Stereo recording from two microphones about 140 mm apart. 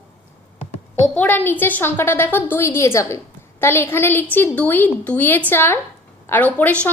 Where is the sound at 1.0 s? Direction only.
10° left (ahead or behind).